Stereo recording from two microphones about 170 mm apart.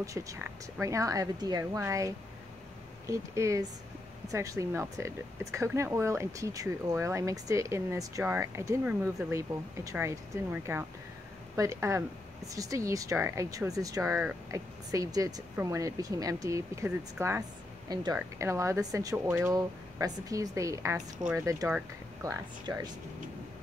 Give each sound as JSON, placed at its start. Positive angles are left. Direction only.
{"t": 0.0, "sound": "speech", "side_deg": -20}